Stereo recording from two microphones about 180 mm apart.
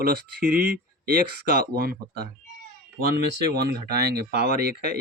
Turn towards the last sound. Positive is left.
turn(degrees=-60)  # may be behind; listen again after turning